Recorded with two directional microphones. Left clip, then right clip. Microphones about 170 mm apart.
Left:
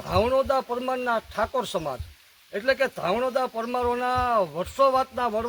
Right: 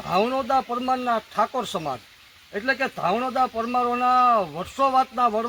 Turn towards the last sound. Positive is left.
turn(degrees=20)  # may be behind; listen again after turning